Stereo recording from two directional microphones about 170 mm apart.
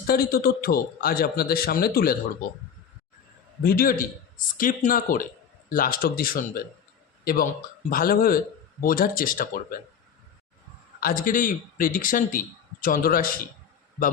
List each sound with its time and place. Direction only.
0.1 s a man's voice: 60° left (ahead or behind)
3.6 s a man's voice: 60° left (ahead or behind)
7.9 s a man's voice: 55° left (ahead or behind)
11.0 s a man's voice: 55° left (ahead or behind)